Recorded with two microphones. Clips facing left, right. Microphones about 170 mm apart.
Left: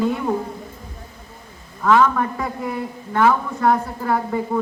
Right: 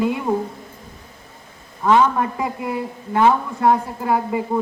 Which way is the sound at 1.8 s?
20° right (ahead or behind).